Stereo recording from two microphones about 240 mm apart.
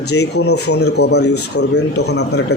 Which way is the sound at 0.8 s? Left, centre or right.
Left.